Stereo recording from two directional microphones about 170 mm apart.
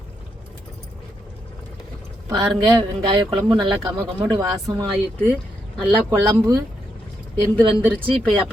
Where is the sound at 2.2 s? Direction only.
25° right (ahead or behind).